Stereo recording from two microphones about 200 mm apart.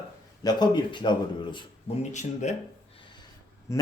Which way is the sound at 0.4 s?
20° left (ahead or behind).